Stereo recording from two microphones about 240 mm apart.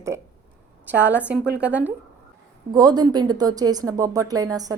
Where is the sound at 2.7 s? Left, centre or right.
Centre.